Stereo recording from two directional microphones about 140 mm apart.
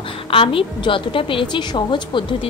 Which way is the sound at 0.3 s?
40° left (ahead or behind).